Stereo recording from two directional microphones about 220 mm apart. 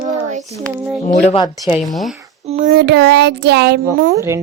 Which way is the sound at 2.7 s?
45° right (ahead or behind).